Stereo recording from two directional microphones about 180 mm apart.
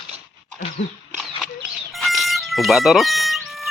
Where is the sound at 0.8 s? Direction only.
40° left (ahead or behind).